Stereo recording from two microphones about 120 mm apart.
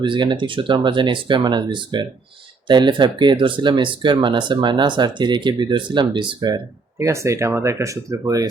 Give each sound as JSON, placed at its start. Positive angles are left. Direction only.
{"t": 0.0, "sound": "speech", "side_deg": -40}
{"t": 7.0, "sound": "speech", "side_deg": -25}